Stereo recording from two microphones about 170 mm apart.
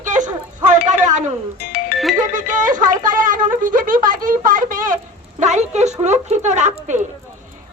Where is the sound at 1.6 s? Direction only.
65° left (ahead or behind).